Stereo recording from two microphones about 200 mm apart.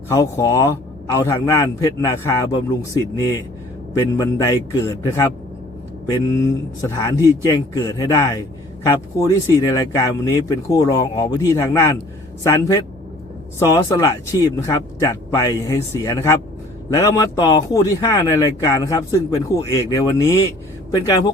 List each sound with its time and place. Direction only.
0.1 s a man's voice: 15° left (ahead or behind)